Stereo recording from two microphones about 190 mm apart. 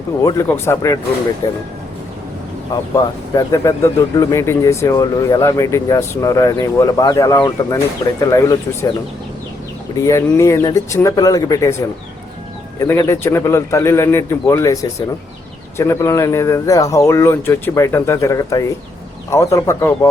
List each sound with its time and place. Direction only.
0.2 s speech: 20° left (ahead or behind)
2.9 s speech: 20° left (ahead or behind)
10.1 s speech: 15° left (ahead or behind)